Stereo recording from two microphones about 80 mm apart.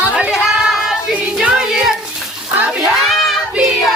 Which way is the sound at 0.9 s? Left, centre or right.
Centre.